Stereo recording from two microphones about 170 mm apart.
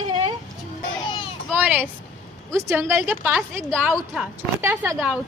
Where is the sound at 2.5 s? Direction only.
15° right (ahead or behind).